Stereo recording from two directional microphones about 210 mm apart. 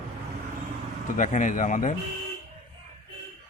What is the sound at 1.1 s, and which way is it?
Speech, 35° left (ahead or behind).